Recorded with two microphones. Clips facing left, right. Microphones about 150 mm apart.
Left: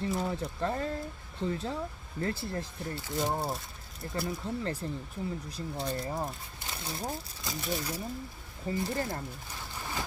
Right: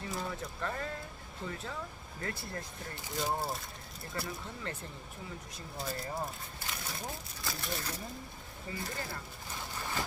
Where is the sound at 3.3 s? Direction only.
Centre (ahead or behind).